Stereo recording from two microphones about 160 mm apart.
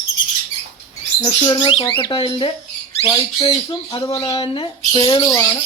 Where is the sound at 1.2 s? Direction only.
30° left (ahead or behind).